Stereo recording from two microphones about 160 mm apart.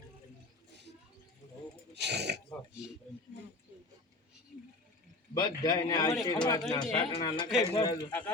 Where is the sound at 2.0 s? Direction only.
90° right.